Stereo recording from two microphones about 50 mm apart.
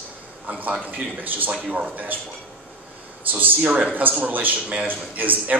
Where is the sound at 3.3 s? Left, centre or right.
Right.